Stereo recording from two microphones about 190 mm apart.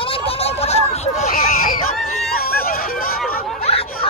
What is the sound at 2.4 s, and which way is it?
Hubbub, 50° left (ahead or behind).